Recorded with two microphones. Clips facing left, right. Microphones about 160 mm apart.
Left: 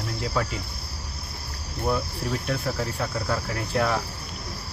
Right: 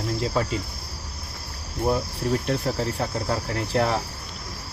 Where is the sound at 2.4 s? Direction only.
30° right (ahead or behind).